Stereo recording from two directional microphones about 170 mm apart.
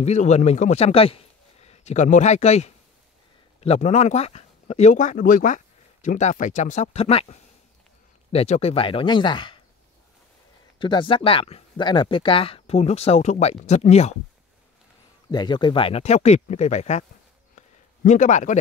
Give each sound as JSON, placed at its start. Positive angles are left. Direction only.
{"t": 0.0, "sound": "a man's voice", "side_deg": 40}
{"t": 10.8, "sound": "speech", "side_deg": 30}
{"t": 15.3, "sound": "speech", "side_deg": 25}
{"t": 17.6, "sound": "a sound", "side_deg": 45}